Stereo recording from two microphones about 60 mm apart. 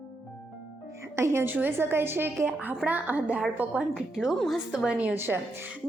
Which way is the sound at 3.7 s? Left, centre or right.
Centre.